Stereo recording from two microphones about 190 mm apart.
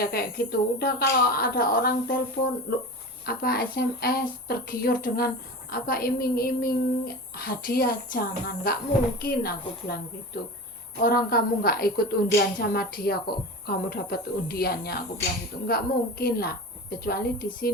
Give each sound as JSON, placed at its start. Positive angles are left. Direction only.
{"t": 0.0, "sound": "a woman's voice", "side_deg": 55}
{"t": 11.0, "sound": "a woman's voice", "side_deg": 55}